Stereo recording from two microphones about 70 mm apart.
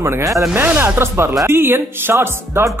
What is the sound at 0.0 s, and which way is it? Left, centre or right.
Speech, right.